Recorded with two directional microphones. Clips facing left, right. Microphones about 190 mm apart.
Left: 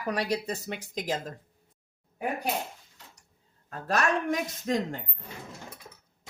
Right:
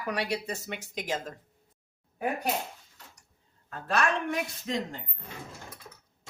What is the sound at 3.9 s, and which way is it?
Speech, 40° left (ahead or behind).